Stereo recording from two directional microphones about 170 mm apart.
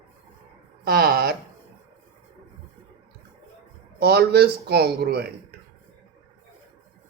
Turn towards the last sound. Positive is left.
turn(degrees=-70)  # may be behind; listen again after turning